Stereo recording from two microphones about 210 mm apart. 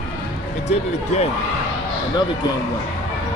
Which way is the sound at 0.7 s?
30° left (ahead or behind).